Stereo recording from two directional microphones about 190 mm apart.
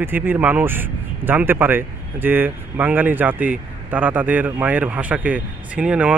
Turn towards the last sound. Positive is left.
turn(degrees=-5)  # may be behind; listen again after turning